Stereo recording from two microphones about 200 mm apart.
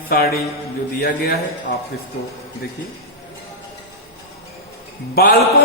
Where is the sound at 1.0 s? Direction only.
50° left (ahead or behind).